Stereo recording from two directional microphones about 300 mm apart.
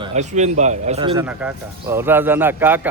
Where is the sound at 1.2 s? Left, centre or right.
Centre.